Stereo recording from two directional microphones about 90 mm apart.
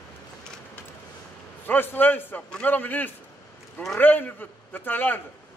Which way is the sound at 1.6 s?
20° left (ahead or behind).